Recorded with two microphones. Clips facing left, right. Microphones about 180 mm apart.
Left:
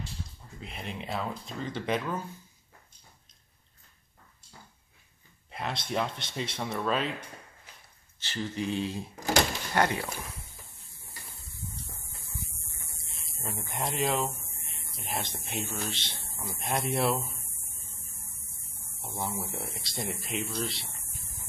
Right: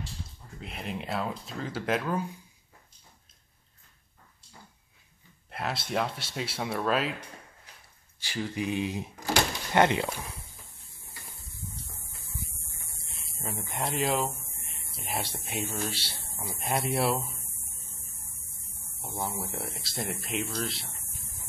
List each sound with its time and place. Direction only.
0.6 s speech: centre (ahead or behind)
5.5 s speech: 5° right (ahead or behind)
8.2 s speech: 10° right (ahead or behind)
13.1 s speech: centre (ahead or behind)
19.1 s speech: centre (ahead or behind)